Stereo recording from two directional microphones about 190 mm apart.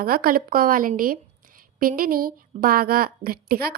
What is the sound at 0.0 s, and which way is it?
A woman's voice, 50° right (ahead or behind).